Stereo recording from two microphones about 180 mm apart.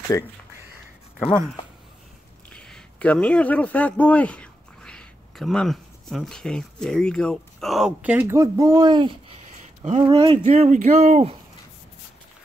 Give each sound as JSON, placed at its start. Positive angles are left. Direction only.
{"t": 2.5, "sound": "speech", "side_deg": 5}
{"t": 9.6, "sound": "a sound", "side_deg": -35}
{"t": 10.0, "sound": "speech", "side_deg": -30}
{"t": 10.4, "sound": "speech", "side_deg": -40}